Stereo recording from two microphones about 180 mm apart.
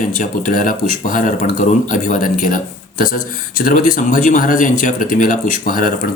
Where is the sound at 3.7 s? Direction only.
50° left (ahead or behind).